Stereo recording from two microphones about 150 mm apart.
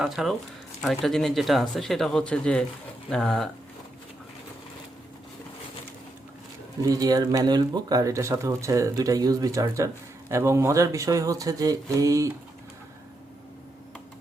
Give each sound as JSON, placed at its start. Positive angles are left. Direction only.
{"t": 0.0, "sound": "speech", "side_deg": 0}
{"t": 6.8, "sound": "speech", "side_deg": -25}